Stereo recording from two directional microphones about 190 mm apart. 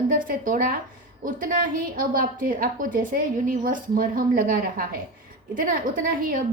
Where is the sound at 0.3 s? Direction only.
45° right (ahead or behind).